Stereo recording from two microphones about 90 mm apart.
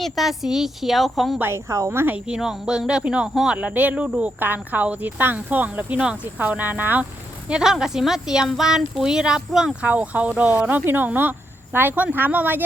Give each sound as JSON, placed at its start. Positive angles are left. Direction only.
{"t": 0.0, "sound": "a woman's voice", "side_deg": 0}
{"t": 1.4, "sound": "speech", "side_deg": -30}
{"t": 2.1, "sound": "speech", "side_deg": -10}
{"t": 7.4, "sound": "speech", "side_deg": -10}